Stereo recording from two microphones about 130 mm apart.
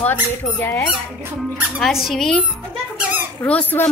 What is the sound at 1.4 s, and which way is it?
Speech, centre (ahead or behind).